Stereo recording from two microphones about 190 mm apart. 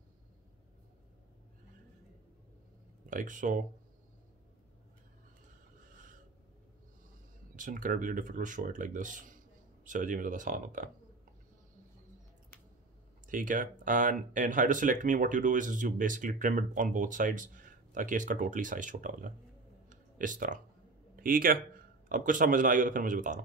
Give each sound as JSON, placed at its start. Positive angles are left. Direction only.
{"t": 3.1, "sound": "speech", "side_deg": -45}
{"t": 5.9, "sound": "a sound", "side_deg": -45}
{"t": 7.5, "sound": "speech", "side_deg": -45}
{"t": 13.3, "sound": "speech", "side_deg": -45}
{"t": 19.9, "sound": "a sound", "side_deg": -45}
{"t": 21.2, "sound": "a man's voice", "side_deg": -50}